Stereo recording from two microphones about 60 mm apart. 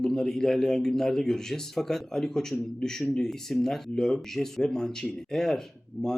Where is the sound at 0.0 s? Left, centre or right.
Centre.